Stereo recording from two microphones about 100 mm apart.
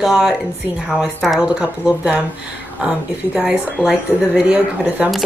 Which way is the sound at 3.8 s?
10° right (ahead or behind).